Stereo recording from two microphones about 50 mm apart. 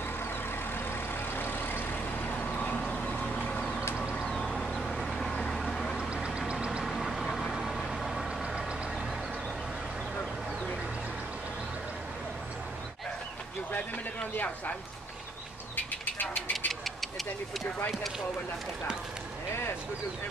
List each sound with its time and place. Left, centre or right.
0.7 s vehicle: left
4.3 s vehicle: centre
6.2 s vehicle: centre
6.8 s vehicle: centre
14.3 s speech: left
15.7 s bird: left
16.3 s a sound: centre